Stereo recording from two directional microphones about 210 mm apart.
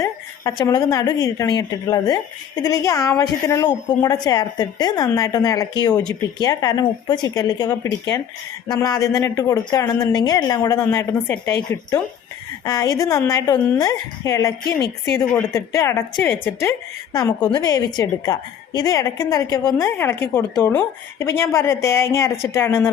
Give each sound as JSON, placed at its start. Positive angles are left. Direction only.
{"t": 0.0, "sound": "a woman's voice", "side_deg": 15}